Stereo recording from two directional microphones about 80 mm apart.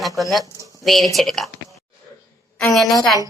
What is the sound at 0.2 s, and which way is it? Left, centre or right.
Speech, centre.